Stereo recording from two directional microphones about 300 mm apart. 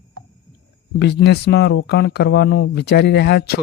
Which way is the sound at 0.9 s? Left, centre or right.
Left.